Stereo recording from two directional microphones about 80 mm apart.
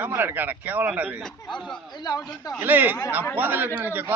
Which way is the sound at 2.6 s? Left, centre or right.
Right.